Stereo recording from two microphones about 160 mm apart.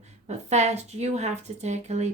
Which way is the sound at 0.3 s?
45° right (ahead or behind).